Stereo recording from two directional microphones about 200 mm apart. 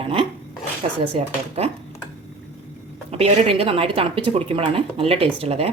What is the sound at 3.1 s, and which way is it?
Speech, 30° right (ahead or behind).